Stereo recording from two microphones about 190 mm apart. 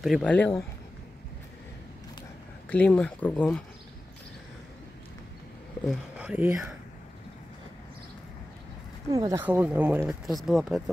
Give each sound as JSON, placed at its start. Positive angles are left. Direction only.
{"t": 0.0, "sound": "speech", "side_deg": 0}
{"t": 2.7, "sound": "speech", "side_deg": 5}
{"t": 5.9, "sound": "speech", "side_deg": -5}
{"t": 9.1, "sound": "speech", "side_deg": -15}